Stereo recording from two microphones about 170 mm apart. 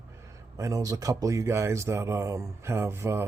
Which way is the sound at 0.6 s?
20° right (ahead or behind).